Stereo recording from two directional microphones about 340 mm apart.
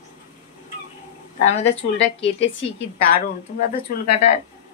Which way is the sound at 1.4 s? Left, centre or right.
Centre.